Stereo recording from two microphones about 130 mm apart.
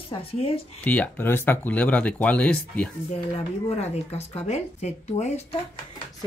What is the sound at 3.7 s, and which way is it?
Speech, 55° left (ahead or behind).